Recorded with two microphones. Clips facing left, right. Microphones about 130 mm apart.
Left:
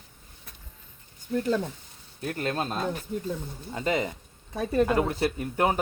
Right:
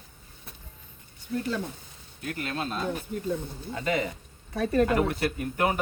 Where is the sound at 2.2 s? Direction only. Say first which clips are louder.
Left 3 dB; 40° left (ahead or behind).